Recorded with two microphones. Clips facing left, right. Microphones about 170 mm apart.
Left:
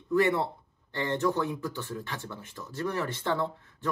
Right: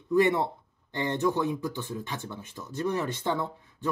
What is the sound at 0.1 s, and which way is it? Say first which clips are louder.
Speech: right 2 dB; 20° right (ahead or behind).